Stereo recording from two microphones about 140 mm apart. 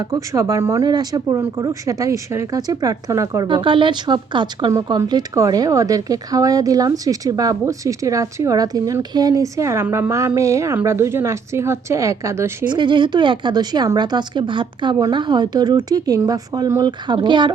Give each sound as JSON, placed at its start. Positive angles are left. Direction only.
{"t": 0.0, "sound": "speech", "side_deg": -25}
{"t": 4.7, "sound": "speech", "side_deg": -25}
{"t": 12.6, "sound": "a woman's voice", "side_deg": -35}